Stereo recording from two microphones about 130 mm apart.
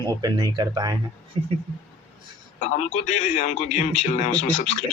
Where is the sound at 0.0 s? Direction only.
30° right (ahead or behind).